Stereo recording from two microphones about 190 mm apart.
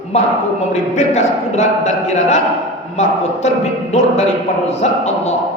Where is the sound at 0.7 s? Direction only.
35° left (ahead or behind).